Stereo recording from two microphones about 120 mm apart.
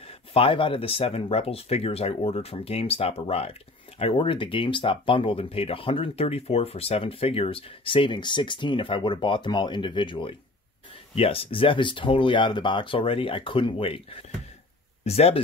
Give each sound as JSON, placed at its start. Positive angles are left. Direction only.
{"t": 0.3, "sound": "speech", "side_deg": 50}